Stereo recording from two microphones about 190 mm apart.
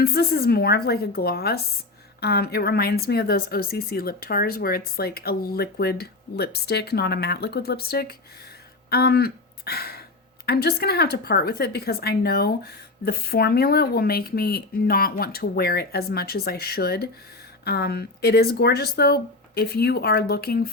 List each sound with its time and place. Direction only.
0.0 s a woman's voice: 55° left (ahead or behind)